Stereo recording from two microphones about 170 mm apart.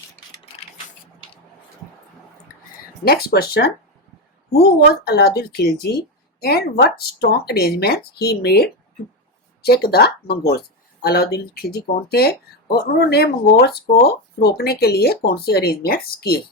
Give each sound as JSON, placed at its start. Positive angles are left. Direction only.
{"t": 3.0, "sound": "speech", "side_deg": 65}